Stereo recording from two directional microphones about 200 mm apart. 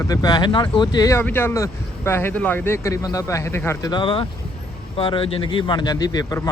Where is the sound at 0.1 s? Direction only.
20° left (ahead or behind).